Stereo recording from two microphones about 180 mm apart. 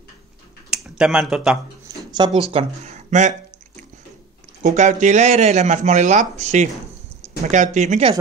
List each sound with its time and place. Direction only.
0.7 s speech: centre (ahead or behind)
2.0 s a sound: 25° right (ahead or behind)
2.5 s speech: 40° right (ahead or behind)
4.6 s speech: 40° right (ahead or behind)